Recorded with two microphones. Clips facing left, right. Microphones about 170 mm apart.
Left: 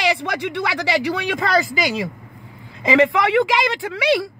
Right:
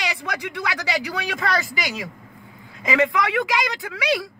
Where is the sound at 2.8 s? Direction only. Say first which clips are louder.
Left 5 dB; 30° left (ahead or behind).